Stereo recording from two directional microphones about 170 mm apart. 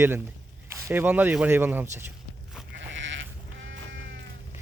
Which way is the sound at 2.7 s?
90° right.